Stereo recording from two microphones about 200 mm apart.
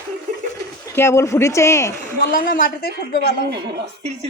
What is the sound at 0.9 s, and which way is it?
Speech, 10° left (ahead or behind).